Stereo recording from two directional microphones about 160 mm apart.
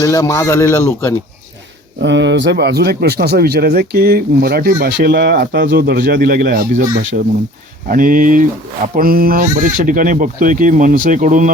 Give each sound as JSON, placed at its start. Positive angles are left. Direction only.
{"t": 0.0, "sound": "speech", "side_deg": 20}
{"t": 2.0, "sound": "speech", "side_deg": -90}
{"t": 7.1, "sound": "speech", "side_deg": -60}